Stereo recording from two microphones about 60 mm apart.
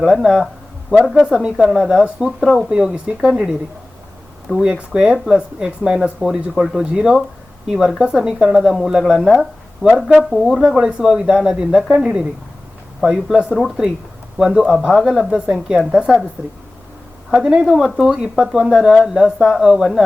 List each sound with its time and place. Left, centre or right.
0.0 s speech: centre
4.6 s speech: centre
6.8 s speech: centre
15.0 s speech: centre
15.3 s speech: centre
17.3 s speech: centre